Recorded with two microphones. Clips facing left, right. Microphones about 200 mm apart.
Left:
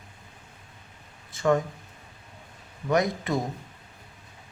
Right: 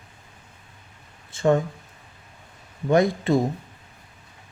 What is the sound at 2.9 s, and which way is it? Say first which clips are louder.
Speech: right 6 dB; 30° right (ahead or behind).